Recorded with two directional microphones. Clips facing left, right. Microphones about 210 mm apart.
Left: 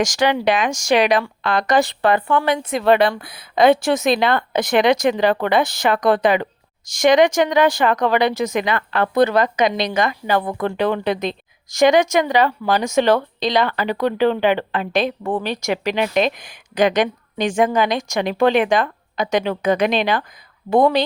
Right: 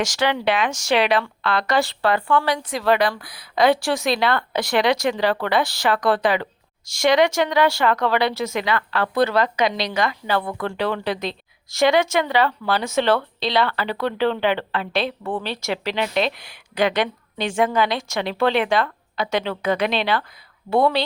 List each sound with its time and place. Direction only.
0.0 s a woman's voice: 15° left (ahead or behind)